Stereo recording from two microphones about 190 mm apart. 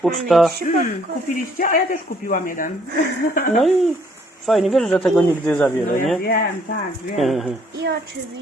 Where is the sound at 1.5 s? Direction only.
45° left (ahead or behind).